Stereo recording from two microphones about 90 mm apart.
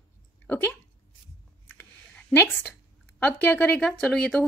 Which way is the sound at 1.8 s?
15° left (ahead or behind).